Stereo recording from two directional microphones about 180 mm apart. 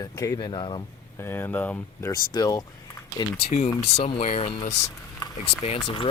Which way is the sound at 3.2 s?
35° left (ahead or behind).